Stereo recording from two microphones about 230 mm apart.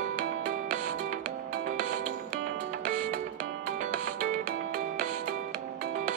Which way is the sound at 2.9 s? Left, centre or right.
Right.